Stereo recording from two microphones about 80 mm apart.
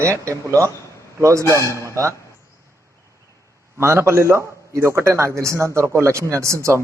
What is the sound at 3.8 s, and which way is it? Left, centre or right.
A man's voice, right.